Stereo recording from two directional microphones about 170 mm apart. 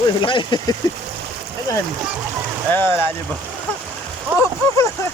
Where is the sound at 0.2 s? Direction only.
30° left (ahead or behind).